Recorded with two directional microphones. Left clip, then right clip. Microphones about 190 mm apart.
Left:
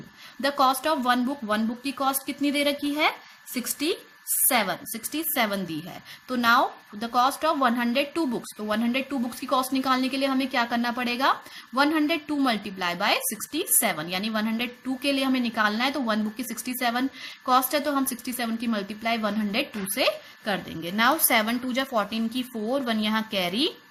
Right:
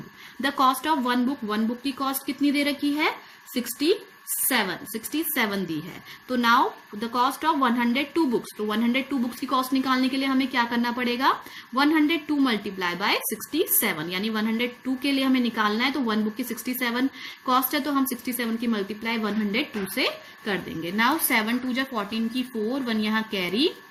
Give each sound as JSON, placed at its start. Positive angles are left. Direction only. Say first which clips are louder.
{"t": 0.4, "sound": "a woman's voice", "louder": "even", "side_deg": 30}
{"t": 7.0, "sound": "a woman's voice", "louder": "left 1 dB", "side_deg": 30}